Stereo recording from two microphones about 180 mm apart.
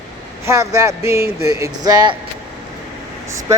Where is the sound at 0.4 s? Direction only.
15° right (ahead or behind).